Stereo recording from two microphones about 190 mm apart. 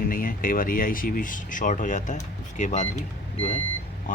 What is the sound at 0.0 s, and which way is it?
Speech, 50° left (ahead or behind).